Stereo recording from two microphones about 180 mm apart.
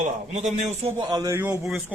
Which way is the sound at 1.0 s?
20° right (ahead or behind).